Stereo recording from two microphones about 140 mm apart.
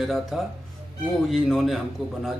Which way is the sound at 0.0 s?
Centre (ahead or behind).